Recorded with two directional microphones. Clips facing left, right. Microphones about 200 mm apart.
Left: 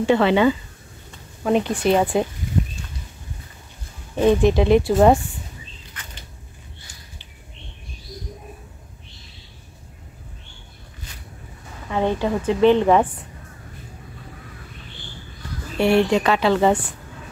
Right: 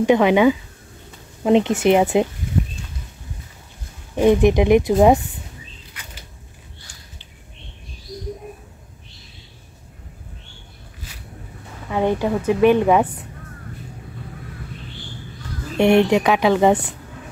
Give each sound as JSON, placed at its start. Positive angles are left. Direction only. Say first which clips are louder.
{"t": 0.0, "sound": "a woman's voice", "louder": "right 2 dB", "side_deg": -15}
{"t": 4.1, "sound": "a woman's voice", "louder": "right 2 dB", "side_deg": -15}
{"t": 11.9, "sound": "a woman's voice", "louder": "right 2 dB", "side_deg": -15}
{"t": 15.8, "sound": "a woman's voice", "louder": "right 3 dB", "side_deg": -20}